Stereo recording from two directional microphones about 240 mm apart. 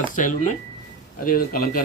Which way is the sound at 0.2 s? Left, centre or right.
Left.